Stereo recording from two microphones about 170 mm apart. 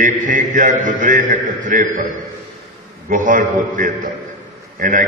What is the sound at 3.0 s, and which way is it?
A man's voice, 50° right (ahead or behind).